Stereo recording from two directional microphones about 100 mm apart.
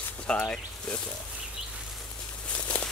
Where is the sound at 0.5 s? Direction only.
10° left (ahead or behind).